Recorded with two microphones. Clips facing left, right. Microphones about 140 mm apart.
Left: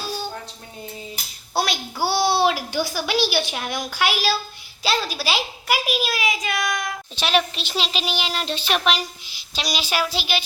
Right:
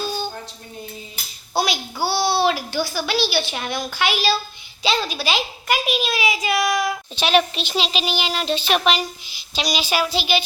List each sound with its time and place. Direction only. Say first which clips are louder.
1.5 s a child's voice: right 2 dB; centre (ahead or behind)
2.0 s a sound: left 1 dB; 15° left (ahead or behind)
2.5 s a woman's voice: right 1 dB; 10° left (ahead or behind)